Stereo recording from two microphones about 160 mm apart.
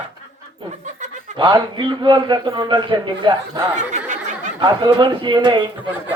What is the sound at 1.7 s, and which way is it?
Speech, 30° right (ahead or behind).